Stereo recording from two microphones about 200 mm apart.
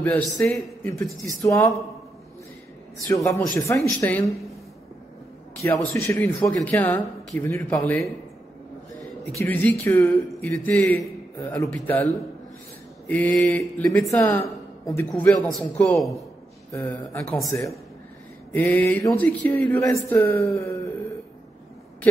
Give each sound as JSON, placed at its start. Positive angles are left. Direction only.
{"t": 0.0, "sound": "a man's voice", "side_deg": 10}
{"t": 3.1, "sound": "a man's voice", "side_deg": 15}
{"t": 5.6, "sound": "a man's voice", "side_deg": 10}
{"t": 9.4, "sound": "a man's voice", "side_deg": 10}
{"t": 13.4, "sound": "a man's voice", "side_deg": 10}
{"t": 14.4, "sound": "a sound", "side_deg": 20}
{"t": 15.0, "sound": "a man's voice", "side_deg": 5}
{"t": 16.7, "sound": "a man's voice", "side_deg": 15}